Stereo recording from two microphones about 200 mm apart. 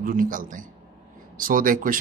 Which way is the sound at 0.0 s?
45° right (ahead or behind).